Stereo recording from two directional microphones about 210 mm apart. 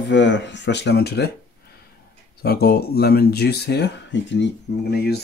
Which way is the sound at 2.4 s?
50° left (ahead or behind).